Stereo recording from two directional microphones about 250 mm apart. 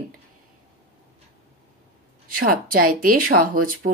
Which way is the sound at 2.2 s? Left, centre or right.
Right.